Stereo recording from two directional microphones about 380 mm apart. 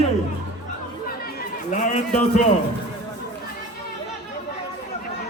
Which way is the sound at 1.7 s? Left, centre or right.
Centre.